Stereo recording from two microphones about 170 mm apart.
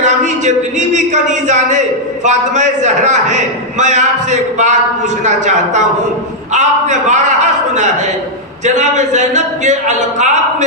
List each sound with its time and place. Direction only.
0.0 s a man's voice: 45° right (ahead or behind)